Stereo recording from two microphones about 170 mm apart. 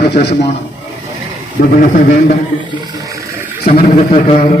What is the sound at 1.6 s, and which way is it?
Speech, 50° left (ahead or behind).